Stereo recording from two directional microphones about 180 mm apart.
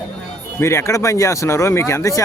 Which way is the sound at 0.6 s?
15° left (ahead or behind).